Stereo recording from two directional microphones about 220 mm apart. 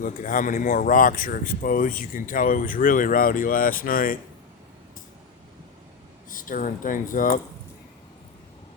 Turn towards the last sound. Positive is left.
turn(degrees=40)  # may be behind; listen again after turning